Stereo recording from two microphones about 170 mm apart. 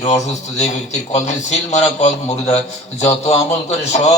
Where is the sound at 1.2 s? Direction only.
45° left (ahead or behind).